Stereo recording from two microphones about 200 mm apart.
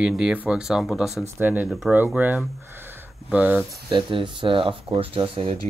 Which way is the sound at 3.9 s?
25° right (ahead or behind).